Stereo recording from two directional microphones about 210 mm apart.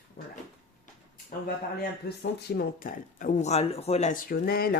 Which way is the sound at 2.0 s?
50° left (ahead or behind).